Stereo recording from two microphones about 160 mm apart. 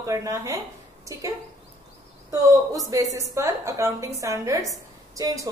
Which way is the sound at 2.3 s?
20° right (ahead or behind).